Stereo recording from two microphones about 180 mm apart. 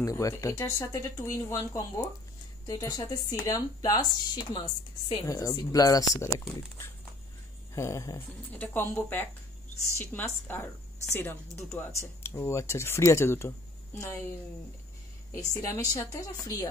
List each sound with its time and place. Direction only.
0.0 s speech: 20° left (ahead or behind)
15.5 s speech: 20° left (ahead or behind)